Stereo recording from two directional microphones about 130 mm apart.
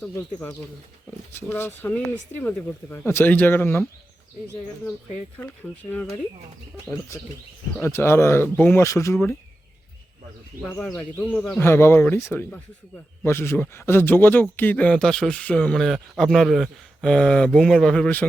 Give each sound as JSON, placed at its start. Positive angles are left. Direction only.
{"t": 0.2, "sound": "speech", "side_deg": 20}
{"t": 5.4, "sound": "speech", "side_deg": 15}
{"t": 7.8, "sound": "speech", "side_deg": 20}
{"t": 10.9, "sound": "speech", "side_deg": 15}